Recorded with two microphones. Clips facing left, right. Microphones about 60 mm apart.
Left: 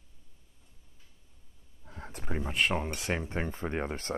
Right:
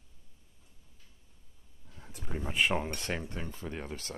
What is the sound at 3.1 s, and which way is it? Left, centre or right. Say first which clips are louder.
Speech: left 3 dB; left.